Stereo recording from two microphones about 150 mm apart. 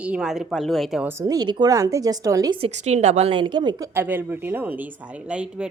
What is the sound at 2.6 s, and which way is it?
A woman's voice, 50° right (ahead or behind).